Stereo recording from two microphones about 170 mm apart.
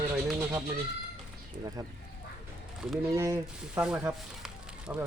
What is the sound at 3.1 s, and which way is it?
Speech, 15° right (ahead or behind).